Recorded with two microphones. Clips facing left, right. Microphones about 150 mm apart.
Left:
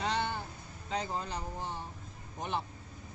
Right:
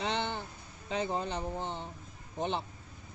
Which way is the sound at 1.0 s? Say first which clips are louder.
Right 4 dB; 20° right (ahead or behind).